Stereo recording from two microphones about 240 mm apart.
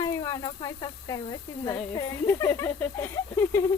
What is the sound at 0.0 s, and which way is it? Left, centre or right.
Speech, centre.